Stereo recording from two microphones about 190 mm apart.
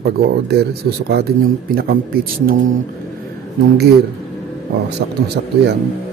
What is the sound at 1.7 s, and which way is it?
Speech, 50° right (ahead or behind).